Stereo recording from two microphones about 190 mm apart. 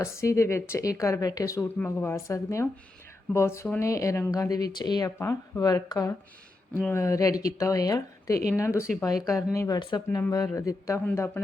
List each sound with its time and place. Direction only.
0.0 s speech: 15° left (ahead or behind)